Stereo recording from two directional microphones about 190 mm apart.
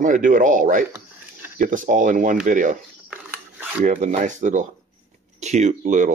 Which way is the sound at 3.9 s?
40° right (ahead or behind).